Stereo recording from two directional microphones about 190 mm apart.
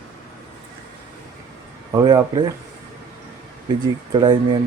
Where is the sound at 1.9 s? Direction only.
20° right (ahead or behind).